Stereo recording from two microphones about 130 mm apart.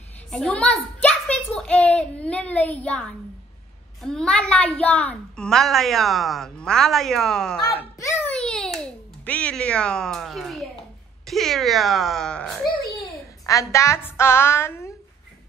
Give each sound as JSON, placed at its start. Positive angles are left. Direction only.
{"t": 0.3, "sound": "a woman's voice", "side_deg": 10}
{"t": 8.3, "sound": "a sound", "side_deg": 5}
{"t": 11.2, "sound": "a woman's voice", "side_deg": 0}
{"t": 13.5, "sound": "a woman's voice", "side_deg": 25}